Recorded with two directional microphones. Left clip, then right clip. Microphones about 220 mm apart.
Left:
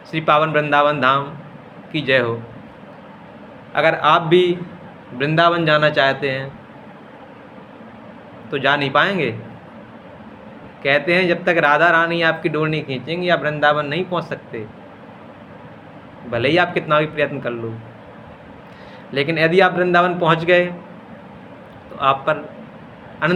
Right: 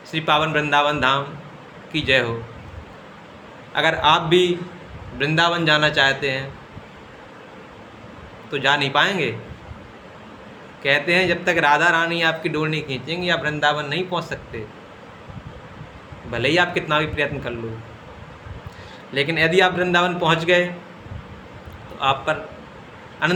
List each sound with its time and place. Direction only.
0.1 s speech: 15° right (ahead or behind)
3.7 s speech: 15° right (ahead or behind)
8.4 s speech: 15° right (ahead or behind)
10.8 s speech: 15° right (ahead or behind)
16.3 s speech: 15° right (ahead or behind)
19.1 s speech: 15° right (ahead or behind)
21.9 s a man's voice: 15° right (ahead or behind)